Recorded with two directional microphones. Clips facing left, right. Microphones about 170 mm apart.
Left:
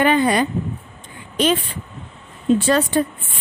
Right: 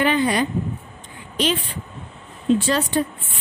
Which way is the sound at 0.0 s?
50° left (ahead or behind).